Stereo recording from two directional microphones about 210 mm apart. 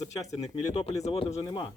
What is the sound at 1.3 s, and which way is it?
Speech, 15° left (ahead or behind).